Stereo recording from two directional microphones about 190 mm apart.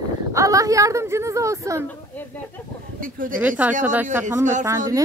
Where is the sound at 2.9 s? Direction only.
45° right (ahead or behind).